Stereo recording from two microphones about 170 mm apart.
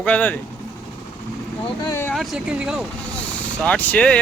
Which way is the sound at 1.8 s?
15° left (ahead or behind).